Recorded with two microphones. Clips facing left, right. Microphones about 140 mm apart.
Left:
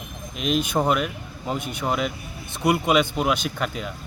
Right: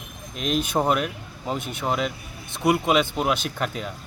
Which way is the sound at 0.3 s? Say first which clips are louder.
Left 1 dB; 5° left (ahead or behind).